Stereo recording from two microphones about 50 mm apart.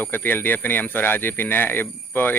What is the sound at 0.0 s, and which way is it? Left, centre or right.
Speech, left.